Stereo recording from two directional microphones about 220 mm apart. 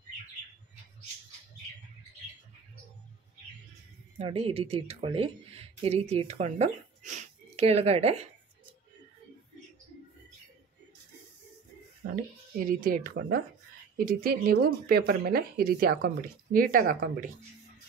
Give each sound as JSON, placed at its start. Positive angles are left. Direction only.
{"t": 4.2, "sound": "speech", "side_deg": -25}
{"t": 12.5, "sound": "speech", "side_deg": -40}